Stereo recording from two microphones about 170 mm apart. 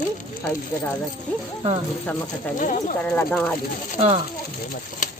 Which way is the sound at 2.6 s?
45° left (ahead or behind).